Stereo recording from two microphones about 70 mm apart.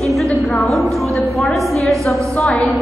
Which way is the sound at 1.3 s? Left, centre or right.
Centre.